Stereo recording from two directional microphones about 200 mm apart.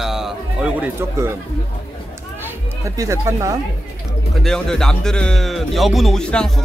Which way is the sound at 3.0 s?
15° right (ahead or behind).